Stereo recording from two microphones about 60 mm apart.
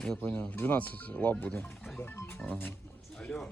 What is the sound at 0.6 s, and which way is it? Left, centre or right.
Speech, left.